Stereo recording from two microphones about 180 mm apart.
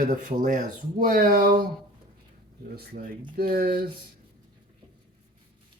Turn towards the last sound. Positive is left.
turn(degrees=-55)  # may be behind; listen again after turning